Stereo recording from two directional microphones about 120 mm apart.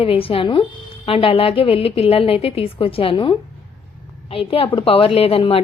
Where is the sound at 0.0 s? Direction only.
50° left (ahead or behind).